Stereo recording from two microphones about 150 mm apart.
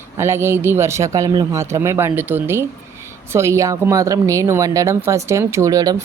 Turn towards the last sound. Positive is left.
turn(degrees=-25)  # may be behind; listen again after turning